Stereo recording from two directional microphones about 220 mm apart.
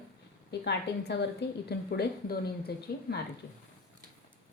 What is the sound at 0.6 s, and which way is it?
Speech, 50° left (ahead or behind).